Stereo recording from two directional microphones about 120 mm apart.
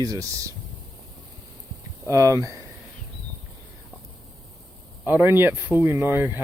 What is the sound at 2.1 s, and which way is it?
Speech, 25° right (ahead or behind).